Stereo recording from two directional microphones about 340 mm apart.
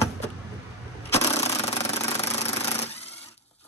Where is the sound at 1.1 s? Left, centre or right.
Centre.